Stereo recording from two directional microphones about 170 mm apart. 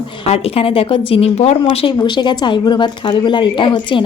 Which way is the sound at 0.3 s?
35° left (ahead or behind).